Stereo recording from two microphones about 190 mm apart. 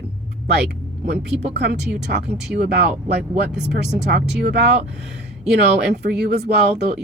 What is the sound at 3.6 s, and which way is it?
Speech, 65° right (ahead or behind).